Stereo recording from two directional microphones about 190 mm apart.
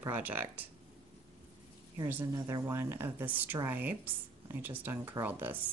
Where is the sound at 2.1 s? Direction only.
15° right (ahead or behind).